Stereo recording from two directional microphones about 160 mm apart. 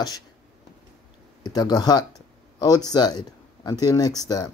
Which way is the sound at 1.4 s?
25° left (ahead or behind).